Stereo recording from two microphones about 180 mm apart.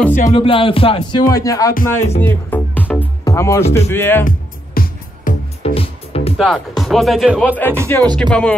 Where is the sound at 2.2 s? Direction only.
10° left (ahead or behind).